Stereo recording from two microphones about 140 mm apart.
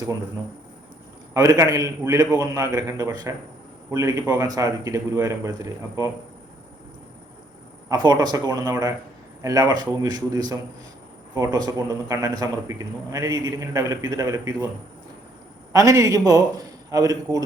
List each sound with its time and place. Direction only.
1.3 s a man's voice: 25° right (ahead or behind)
7.9 s a man's voice: 30° right (ahead or behind)
15.7 s a man's voice: 25° right (ahead or behind)